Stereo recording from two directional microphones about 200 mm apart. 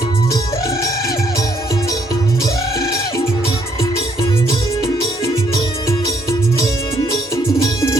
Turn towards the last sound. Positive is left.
turn(degrees=15)  # may be behind; listen again after turning